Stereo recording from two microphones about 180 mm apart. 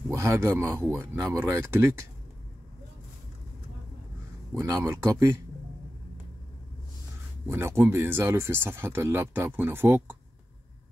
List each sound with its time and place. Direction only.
0.1 s speech: 15° right (ahead or behind)
4.6 s speech: 15° right (ahead or behind)
7.4 s speech: 15° right (ahead or behind)